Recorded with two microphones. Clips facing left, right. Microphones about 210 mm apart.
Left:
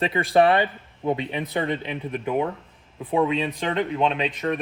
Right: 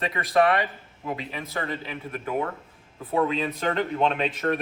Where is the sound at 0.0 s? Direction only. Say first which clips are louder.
Left 3 dB; 30° left (ahead or behind).